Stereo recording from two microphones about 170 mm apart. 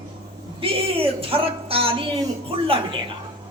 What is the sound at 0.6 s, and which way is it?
A woman's voice, 35° right (ahead or behind).